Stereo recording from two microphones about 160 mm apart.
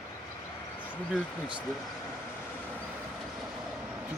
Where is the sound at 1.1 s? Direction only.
5° right (ahead or behind).